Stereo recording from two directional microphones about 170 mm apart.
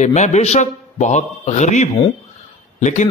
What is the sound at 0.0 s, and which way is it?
A man's voice, 45° left (ahead or behind).